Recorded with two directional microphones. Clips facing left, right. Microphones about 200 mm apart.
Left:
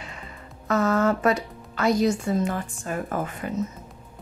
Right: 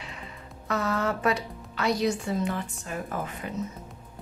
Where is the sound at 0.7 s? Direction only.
45° left (ahead or behind).